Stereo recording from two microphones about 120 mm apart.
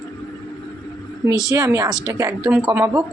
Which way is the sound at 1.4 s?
30° right (ahead or behind).